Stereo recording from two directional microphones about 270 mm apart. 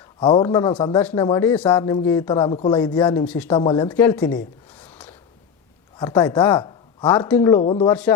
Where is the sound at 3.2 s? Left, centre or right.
Centre.